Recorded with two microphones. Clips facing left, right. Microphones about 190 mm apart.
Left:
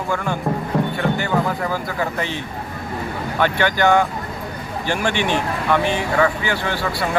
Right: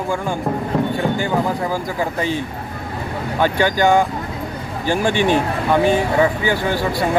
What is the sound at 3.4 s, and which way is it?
Speech, 15° right (ahead or behind).